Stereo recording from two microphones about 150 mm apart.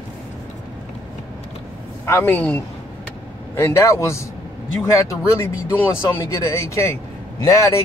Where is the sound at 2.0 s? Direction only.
15° left (ahead or behind).